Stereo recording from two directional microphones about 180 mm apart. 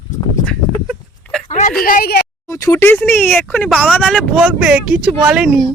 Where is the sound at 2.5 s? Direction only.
15° left (ahead or behind).